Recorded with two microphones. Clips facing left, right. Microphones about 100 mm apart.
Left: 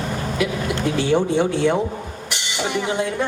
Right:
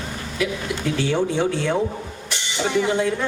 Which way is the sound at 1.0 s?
15° left (ahead or behind).